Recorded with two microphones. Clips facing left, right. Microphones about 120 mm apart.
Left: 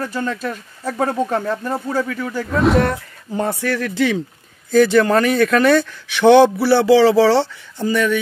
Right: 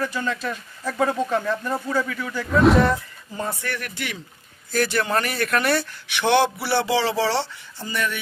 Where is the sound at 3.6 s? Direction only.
90° left.